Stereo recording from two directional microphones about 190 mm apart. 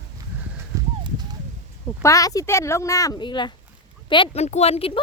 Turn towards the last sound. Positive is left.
turn(degrees=30)  # may be behind; listen again after turning